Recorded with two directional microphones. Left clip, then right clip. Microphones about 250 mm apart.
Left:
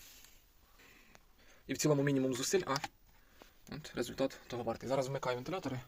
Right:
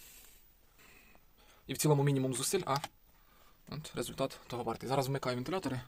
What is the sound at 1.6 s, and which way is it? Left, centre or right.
Speech, centre.